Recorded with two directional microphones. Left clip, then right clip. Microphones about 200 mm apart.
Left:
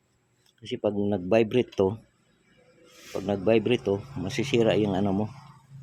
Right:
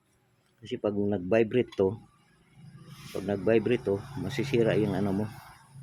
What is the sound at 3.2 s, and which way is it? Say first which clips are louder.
Speech: left 2 dB; 15° left (ahead or behind).